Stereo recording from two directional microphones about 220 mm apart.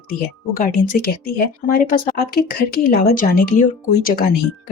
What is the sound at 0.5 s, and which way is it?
Speech, 40° left (ahead or behind).